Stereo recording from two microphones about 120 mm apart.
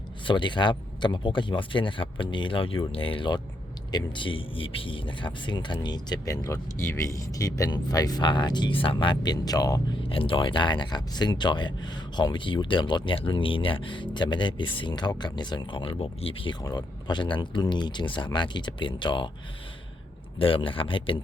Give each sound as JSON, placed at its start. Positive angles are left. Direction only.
{"t": 0.3, "sound": "speech", "side_deg": 40}
{"t": 10.1, "sound": "speech", "side_deg": 45}
{"t": 16.6, "sound": "speech", "side_deg": 35}
{"t": 20.4, "sound": "speech", "side_deg": 45}